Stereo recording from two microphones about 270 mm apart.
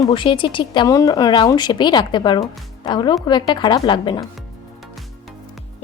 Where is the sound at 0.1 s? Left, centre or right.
Centre.